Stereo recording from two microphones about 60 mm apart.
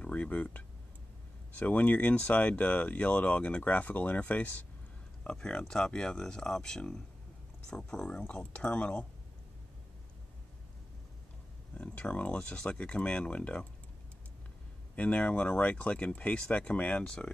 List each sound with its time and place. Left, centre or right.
0.0 s speech: left
5.2 s speech: centre
11.7 s speech: left
15.0 s speech: left